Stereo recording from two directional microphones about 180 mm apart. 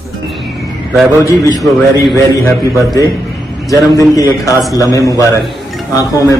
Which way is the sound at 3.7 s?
20° left (ahead or behind).